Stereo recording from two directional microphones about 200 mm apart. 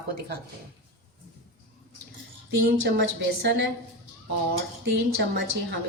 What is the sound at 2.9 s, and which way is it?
Speech, 60° right (ahead or behind).